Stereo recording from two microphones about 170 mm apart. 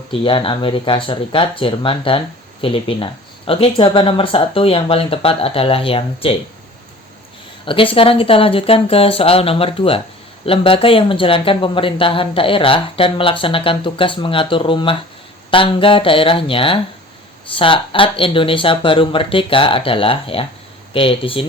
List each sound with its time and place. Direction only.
0.1 s speech: 30° left (ahead or behind)
7.6 s speech: 30° left (ahead or behind)